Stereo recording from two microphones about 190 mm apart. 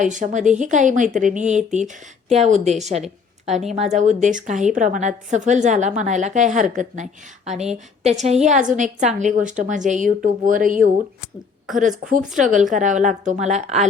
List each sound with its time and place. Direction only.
0.0 s a woman's voice: 40° right (ahead or behind)
3.8 s a woman's voice: 40° right (ahead or behind)
12.4 s a woman's voice: 40° right (ahead or behind)